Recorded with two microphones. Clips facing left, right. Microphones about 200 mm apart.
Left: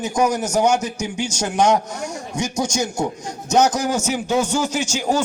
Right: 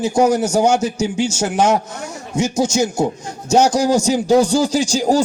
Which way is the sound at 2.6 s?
25° right (ahead or behind).